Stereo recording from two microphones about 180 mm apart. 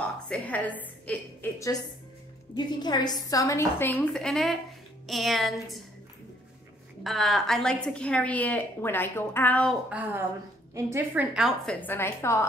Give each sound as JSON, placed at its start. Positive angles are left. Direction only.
{"t": 0.3, "sound": "a woman's voice", "side_deg": 10}
{"t": 5.0, "sound": "music", "side_deg": 0}
{"t": 7.0, "sound": "a woman's voice", "side_deg": 0}
{"t": 9.8, "sound": "a woman's voice", "side_deg": -10}
{"t": 11.7, "sound": "a woman's voice", "side_deg": 10}